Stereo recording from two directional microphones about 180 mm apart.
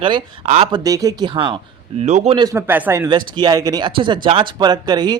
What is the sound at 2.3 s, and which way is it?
Speech, 20° right (ahead or behind).